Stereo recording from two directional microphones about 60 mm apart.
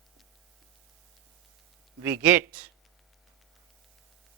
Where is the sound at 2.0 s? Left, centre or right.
Right.